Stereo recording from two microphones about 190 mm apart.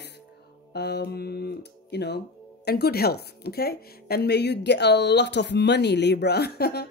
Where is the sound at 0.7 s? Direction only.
60° left (ahead or behind).